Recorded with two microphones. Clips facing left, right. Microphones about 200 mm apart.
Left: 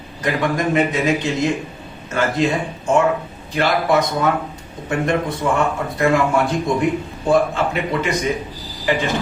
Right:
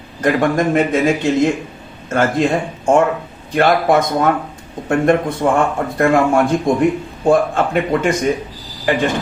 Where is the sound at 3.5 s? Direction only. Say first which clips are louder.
Right 4 dB; 55° right (ahead or behind).